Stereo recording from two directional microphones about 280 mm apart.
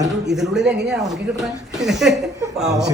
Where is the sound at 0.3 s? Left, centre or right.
Centre.